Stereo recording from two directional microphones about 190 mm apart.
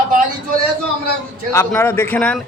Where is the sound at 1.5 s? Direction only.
15° left (ahead or behind).